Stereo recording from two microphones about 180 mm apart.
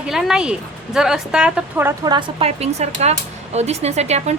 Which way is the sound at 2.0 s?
25° right (ahead or behind).